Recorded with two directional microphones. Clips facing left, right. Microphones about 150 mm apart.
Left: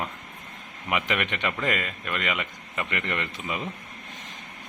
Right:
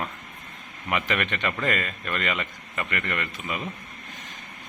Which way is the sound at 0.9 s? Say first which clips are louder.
Right 1 dB; 15° left (ahead or behind).